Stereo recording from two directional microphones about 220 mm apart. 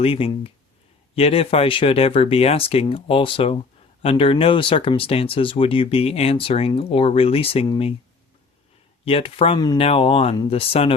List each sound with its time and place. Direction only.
0.0 s speech: 25° left (ahead or behind)
9.0 s speech: 25° left (ahead or behind)